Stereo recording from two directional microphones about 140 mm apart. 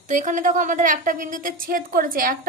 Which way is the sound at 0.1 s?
60° right (ahead or behind).